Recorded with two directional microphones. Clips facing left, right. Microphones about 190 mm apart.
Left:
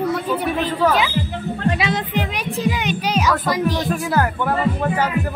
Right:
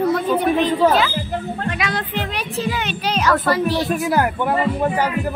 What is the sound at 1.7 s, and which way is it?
Music, 30° left (ahead or behind).